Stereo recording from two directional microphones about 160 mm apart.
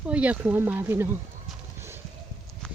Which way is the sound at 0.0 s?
10° right (ahead or behind).